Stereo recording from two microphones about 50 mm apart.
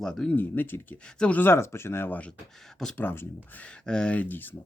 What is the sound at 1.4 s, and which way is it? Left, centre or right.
Speech, left.